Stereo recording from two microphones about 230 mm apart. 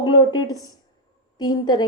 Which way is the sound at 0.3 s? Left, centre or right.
Centre.